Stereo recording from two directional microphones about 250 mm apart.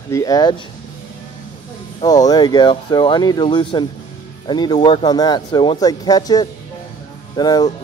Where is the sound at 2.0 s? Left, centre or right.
Centre.